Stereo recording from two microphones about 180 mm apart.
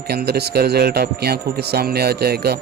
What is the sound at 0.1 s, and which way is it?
A man's voice, 60° right (ahead or behind).